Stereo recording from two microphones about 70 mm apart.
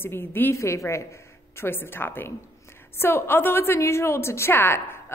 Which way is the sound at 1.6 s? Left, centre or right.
Left.